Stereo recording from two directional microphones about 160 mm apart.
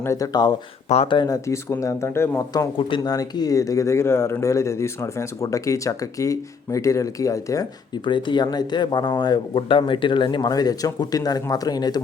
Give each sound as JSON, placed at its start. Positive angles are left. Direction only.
{"t": 0.0, "sound": "speech", "side_deg": 20}
{"t": 0.9, "sound": "speech", "side_deg": 35}